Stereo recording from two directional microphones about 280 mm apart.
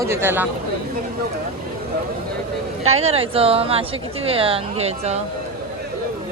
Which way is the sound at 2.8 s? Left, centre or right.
Right.